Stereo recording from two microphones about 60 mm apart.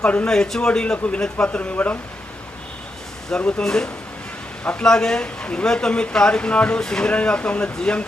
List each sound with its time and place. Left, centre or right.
0.0 s speech: left
0.3 s speech: centre; by 2.0 s left
3.6 s speech: centre